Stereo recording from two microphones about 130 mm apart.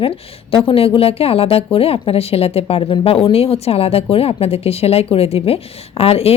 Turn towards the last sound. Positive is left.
turn(degrees=50)  # may be behind; listen again after turning